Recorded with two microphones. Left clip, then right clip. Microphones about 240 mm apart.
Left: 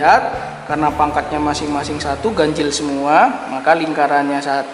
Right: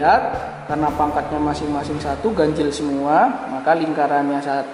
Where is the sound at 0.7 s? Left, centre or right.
Centre.